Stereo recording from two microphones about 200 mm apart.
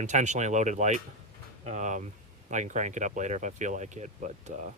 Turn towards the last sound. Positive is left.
turn(degrees=-35)  # may be behind; listen again after turning